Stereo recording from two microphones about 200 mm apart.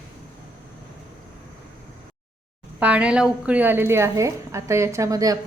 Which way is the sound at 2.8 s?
5° right (ahead or behind).